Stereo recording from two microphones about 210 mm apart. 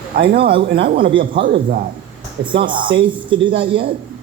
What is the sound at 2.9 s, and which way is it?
Speech, 25° right (ahead or behind).